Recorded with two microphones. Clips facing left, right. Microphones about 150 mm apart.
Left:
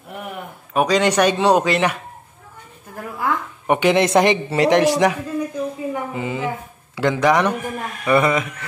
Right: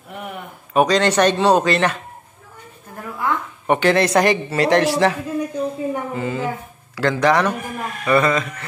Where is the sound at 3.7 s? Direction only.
15° left (ahead or behind).